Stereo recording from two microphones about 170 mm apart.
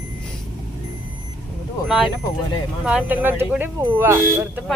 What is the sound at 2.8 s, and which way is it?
Speech, 5° right (ahead or behind).